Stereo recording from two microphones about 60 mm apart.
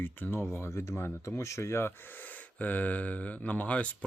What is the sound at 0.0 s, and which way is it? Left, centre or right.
Speech, left.